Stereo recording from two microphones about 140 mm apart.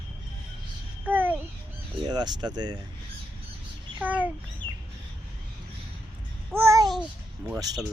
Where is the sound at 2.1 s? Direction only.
30° right (ahead or behind).